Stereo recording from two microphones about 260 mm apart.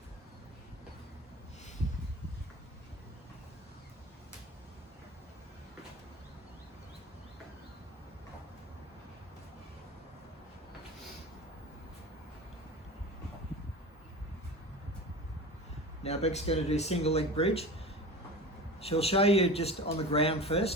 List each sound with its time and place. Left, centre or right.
16.0 s a man's voice: left
18.8 s a man's voice: left